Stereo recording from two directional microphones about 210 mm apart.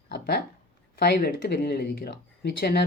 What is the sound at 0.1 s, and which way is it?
Speech, 50° left (ahead or behind).